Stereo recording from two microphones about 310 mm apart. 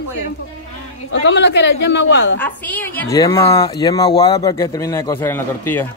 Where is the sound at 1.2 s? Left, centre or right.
Left.